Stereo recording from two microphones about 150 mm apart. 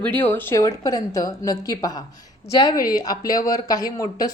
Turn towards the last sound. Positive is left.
turn(degrees=25)  # may be behind; listen again after turning